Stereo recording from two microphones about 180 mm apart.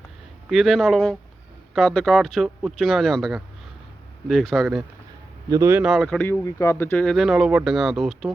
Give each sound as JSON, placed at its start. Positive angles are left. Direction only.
{"t": 0.5, "sound": "speech", "side_deg": 0}
{"t": 5.5, "sound": "speech", "side_deg": -15}
{"t": 5.8, "sound": "speech", "side_deg": 0}